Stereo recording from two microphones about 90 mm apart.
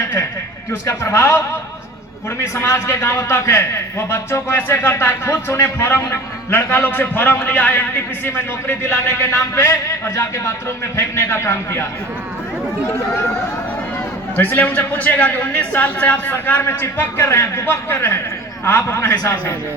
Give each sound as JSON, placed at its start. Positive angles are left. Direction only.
{"t": 0.7, "sound": "a man's voice", "side_deg": 35}
{"t": 14.3, "sound": "a man's voice", "side_deg": 20}